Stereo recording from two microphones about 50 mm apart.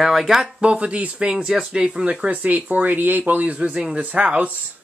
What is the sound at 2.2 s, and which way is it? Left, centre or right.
Speech, right.